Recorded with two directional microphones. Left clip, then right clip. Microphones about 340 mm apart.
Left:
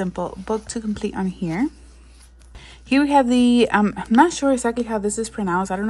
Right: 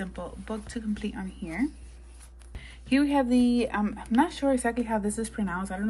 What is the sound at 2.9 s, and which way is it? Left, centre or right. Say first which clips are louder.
A woman's voice: left 8 dB; centre.